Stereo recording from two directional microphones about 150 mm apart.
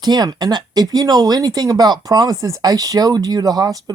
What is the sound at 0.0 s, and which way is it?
Speech, 25° right (ahead or behind).